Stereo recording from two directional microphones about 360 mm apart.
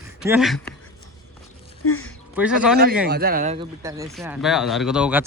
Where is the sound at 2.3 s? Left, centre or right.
Centre.